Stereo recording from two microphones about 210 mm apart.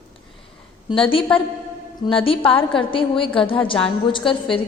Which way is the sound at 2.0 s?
25° left (ahead or behind).